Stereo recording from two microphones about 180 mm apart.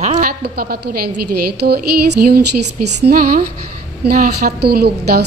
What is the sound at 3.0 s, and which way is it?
A woman's voice, 55° right (ahead or behind).